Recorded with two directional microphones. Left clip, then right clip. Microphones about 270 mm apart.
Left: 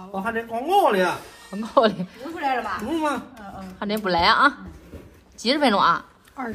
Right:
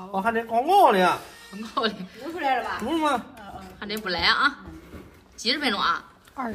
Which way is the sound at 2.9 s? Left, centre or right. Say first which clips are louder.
Right 1 dB; right.